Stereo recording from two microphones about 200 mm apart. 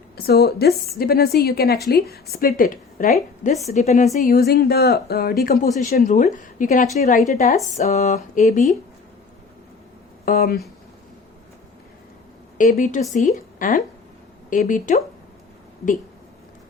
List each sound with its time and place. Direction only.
0.2 s a woman's voice: 50° left (ahead or behind)
10.2 s a woman's voice: 45° left (ahead or behind)
12.5 s speech: 40° left (ahead or behind)